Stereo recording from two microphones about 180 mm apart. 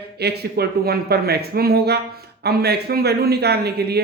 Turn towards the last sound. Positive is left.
turn(degrees=-65)  # may be behind; listen again after turning